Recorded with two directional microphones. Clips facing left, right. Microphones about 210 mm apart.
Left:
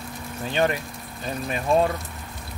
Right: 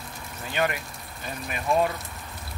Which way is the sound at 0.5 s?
30° left (ahead or behind).